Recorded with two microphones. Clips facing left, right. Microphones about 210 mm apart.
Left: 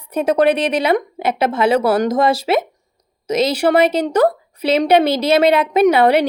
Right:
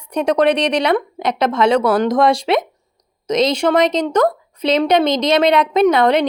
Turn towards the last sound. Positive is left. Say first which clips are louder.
# left 1 dB
turn(degrees=10)  # may be behind; listen again after turning